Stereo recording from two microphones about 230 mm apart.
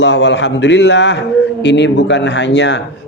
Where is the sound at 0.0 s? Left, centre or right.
Left.